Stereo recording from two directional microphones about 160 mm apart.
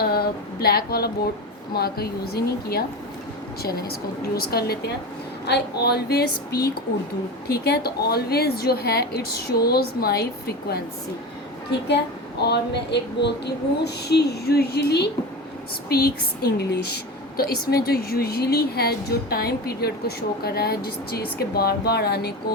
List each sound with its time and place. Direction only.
0.0 s a woman's voice: 75° left (ahead or behind)
5.5 s a woman's voice: 90° left
12.4 s a sound: 90° left
15.9 s a woman's voice: 75° left (ahead or behind)